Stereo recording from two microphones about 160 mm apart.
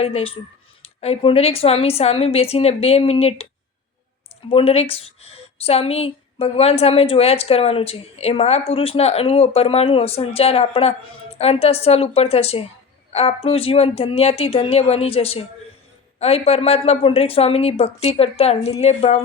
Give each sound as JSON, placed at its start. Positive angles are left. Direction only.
{"t": 0.0, "sound": "a woman's voice", "side_deg": 40}
{"t": 4.4, "sound": "a woman's voice", "side_deg": 35}